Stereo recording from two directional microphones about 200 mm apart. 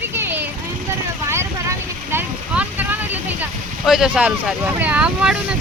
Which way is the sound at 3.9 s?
5° right (ahead or behind).